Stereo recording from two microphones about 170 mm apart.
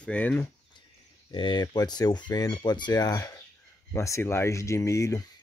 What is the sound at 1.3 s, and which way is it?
Speech, 30° left (ahead or behind).